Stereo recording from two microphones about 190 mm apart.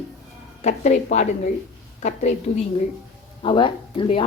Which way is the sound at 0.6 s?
40° left (ahead or behind).